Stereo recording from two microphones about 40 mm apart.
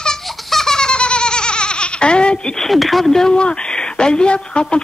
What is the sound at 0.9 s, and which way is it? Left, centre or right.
Giggle, left.